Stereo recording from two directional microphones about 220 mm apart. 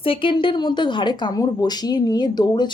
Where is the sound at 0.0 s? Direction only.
25° left (ahead or behind).